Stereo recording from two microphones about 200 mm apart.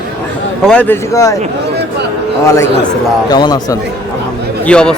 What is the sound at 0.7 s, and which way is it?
Speech, 10° left (ahead or behind).